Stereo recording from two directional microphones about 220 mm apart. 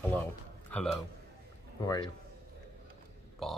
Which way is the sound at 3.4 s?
Centre (ahead or behind).